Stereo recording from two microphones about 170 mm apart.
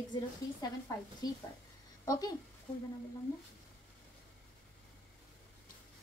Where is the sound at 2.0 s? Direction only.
20° left (ahead or behind).